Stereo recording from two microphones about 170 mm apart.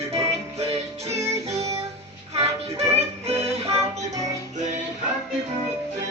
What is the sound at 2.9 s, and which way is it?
Music, 35° right (ahead or behind).